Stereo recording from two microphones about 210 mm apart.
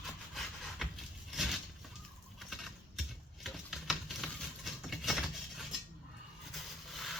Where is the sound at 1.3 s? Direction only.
Centre (ahead or behind).